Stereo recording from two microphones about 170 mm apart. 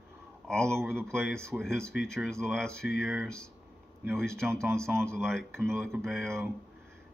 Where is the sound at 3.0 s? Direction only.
10° right (ahead or behind).